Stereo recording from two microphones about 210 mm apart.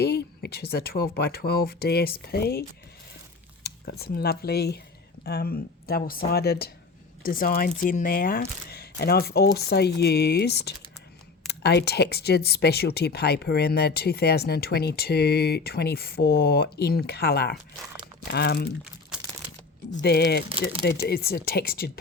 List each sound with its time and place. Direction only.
0.0 s speech: 50° left (ahead or behind)
20.0 s speech: 50° left (ahead or behind)